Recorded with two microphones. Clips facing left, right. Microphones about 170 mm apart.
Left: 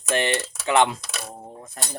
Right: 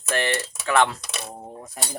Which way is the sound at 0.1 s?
20° left (ahead or behind).